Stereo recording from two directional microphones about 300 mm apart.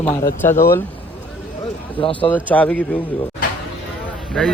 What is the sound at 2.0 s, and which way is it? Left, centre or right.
Speech, centre.